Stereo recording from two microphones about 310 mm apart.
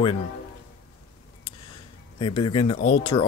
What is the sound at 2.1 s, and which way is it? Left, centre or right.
Speech, centre.